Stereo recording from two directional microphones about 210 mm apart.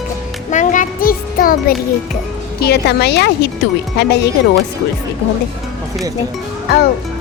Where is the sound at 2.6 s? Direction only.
50° left (ahead or behind).